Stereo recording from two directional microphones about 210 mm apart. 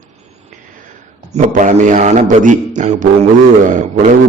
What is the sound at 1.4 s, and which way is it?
A man's voice, 35° right (ahead or behind).